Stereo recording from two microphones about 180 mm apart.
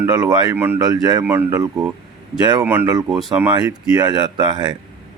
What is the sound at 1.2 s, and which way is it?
Speech, 10° right (ahead or behind).